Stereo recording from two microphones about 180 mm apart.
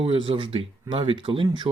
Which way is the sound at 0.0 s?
30° right (ahead or behind).